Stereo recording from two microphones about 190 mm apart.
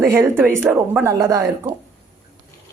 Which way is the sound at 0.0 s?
15° right (ahead or behind).